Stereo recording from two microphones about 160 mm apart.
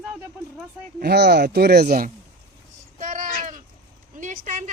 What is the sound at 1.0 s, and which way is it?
Speech, 90° right.